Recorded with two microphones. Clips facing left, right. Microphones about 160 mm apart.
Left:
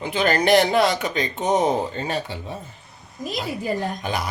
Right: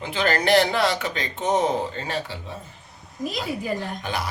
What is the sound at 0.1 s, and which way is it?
Speech, 15° left (ahead or behind).